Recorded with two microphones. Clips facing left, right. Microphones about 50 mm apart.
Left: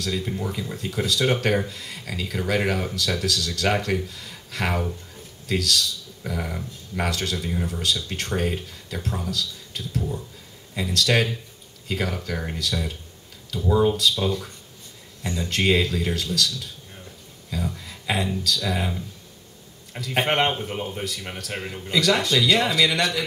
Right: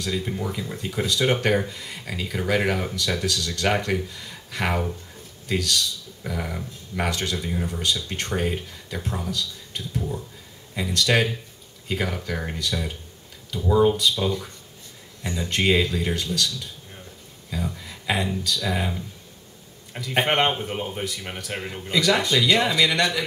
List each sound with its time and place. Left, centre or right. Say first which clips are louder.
0.0 s speech: even; centre
11.1 s speech: right 1 dB; centre
13.5 s speech: right 1 dB; centre
14.1 s speech: even; centre
15.6 s speech: even; centre
17.5 s a sound: even; centre
18.2 s speech: even; centre
20.1 s speech: right 1 dB; centre